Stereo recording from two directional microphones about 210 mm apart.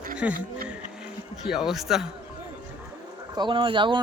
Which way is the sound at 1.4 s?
Centre (ahead or behind).